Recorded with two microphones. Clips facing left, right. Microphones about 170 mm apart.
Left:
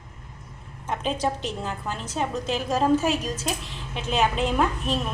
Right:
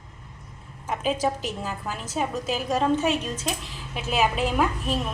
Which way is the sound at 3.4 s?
Centre (ahead or behind).